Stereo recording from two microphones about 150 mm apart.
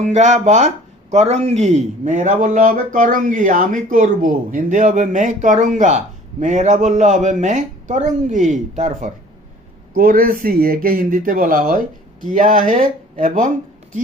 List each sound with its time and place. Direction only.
0.0 s a man's voice: 50° right (ahead or behind)
9.9 s a man's voice: 75° right (ahead or behind)